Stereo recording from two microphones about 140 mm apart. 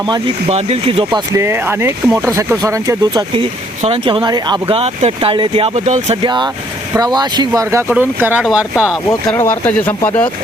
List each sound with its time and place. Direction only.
0.0 s speech: 35° right (ahead or behind)
0.5 s speech: 45° right (ahead or behind)
1.3 s speech: 20° right (ahead or behind)
3.8 s speech: 40° right (ahead or behind)
4.7 s speech: 45° right (ahead or behind)
6.2 s speech: 35° right (ahead or behind)
7.9 s speech: 10° right (ahead or behind)
8.7 s speech: 15° left (ahead or behind)